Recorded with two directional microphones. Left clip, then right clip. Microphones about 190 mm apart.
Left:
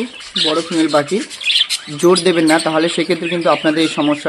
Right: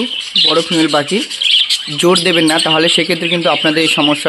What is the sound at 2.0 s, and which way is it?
Speech, 10° right (ahead or behind).